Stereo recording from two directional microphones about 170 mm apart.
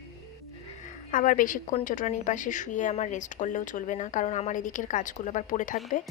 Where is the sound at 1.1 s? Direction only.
50° left (ahead or behind).